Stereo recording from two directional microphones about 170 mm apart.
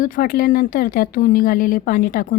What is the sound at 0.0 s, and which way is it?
A woman's voice, 55° left (ahead or behind).